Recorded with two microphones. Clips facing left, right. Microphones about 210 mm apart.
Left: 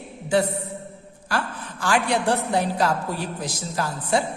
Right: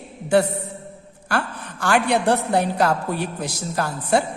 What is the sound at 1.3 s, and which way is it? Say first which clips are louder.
A woman's voice: right 2 dB; 65° right (ahead or behind).